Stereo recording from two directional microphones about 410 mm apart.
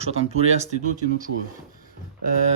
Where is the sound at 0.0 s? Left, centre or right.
Centre.